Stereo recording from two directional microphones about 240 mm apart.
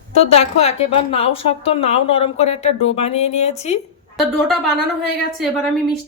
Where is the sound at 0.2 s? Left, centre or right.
Left.